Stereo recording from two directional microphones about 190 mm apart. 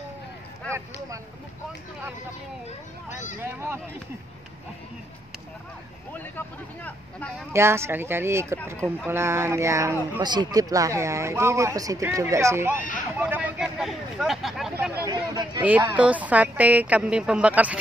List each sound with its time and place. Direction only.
0.7 s speech: 15° right (ahead or behind)
3.3 s speech: 10° right (ahead or behind)
6.1 s speech: 10° left (ahead or behind)
7.5 s speech: 15° right (ahead or behind)
15.0 s speech: 20° right (ahead or behind)
15.6 s speech: 10° right (ahead or behind)